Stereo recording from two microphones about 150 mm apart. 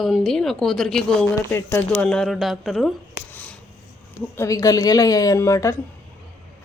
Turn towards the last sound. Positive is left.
turn(degrees=20)  # may be behind; listen again after turning